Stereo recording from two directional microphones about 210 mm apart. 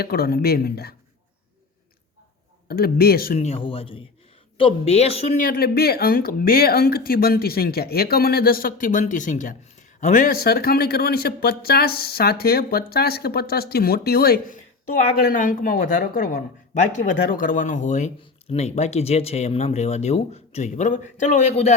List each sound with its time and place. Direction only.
0.0 s speech: 45° left (ahead or behind)
2.6 s speech: 45° left (ahead or behind)
3.3 s speech: 30° left (ahead or behind)
5.4 s speech: 45° left (ahead or behind)